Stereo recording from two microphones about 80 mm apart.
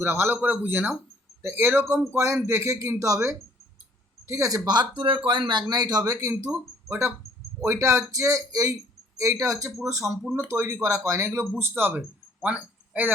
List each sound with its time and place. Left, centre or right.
0.0 s speech: right
2.1 s speech: right
4.3 s speech: right
6.1 s speech: right
7.6 s speech: right
12.4 s a sound: centre